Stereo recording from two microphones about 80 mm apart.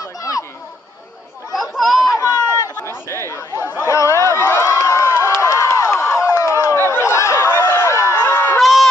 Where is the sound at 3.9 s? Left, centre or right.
Left.